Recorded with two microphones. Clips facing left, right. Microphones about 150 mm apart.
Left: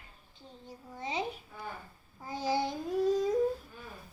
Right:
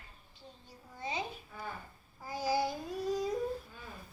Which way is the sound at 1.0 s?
20° left (ahead or behind).